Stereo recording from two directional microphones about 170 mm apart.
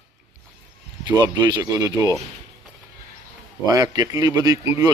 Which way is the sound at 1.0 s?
25° right (ahead or behind).